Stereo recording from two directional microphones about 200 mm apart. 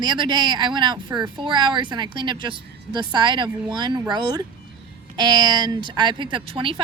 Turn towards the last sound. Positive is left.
turn(degrees=-25)  # may be behind; listen again after turning